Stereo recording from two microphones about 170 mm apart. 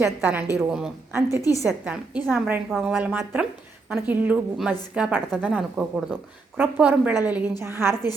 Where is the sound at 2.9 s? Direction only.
10° right (ahead or behind).